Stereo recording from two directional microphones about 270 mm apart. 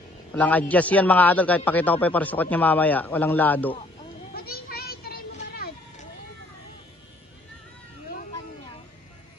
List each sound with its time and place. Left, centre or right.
0.3 s a man's voice: centre
4.3 s vehicle: left